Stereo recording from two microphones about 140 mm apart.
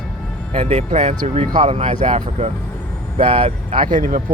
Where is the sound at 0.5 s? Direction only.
50° right (ahead or behind).